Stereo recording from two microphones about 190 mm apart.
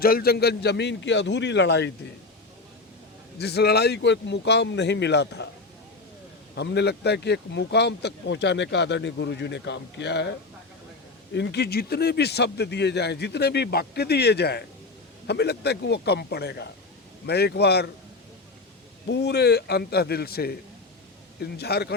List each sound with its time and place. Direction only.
0.0 s speech: 55° left (ahead or behind)
3.3 s speech: 60° left (ahead or behind)
6.6 s speech: 60° left (ahead or behind)
11.3 s speech: 60° left (ahead or behind)
19.0 s speech: 65° left (ahead or behind)